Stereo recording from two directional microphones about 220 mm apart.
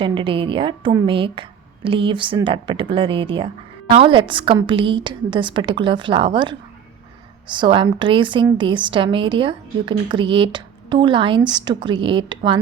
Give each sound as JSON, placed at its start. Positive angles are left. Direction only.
{"t": 0.0, "sound": "a woman's voice", "side_deg": -20}